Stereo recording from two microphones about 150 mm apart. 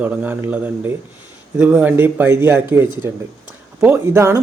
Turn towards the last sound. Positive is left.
turn(degrees=-20)  # may be behind; listen again after turning